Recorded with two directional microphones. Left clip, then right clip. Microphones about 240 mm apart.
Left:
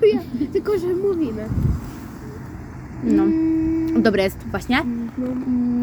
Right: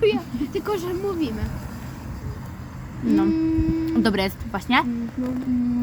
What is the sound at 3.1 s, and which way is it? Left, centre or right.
Speech, centre.